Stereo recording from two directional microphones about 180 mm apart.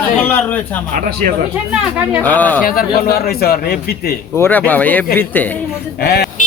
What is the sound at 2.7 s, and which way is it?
A man's voice, 55° left (ahead or behind).